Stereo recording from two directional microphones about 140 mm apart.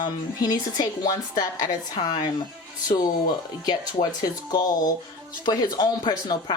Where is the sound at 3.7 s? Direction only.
30° left (ahead or behind).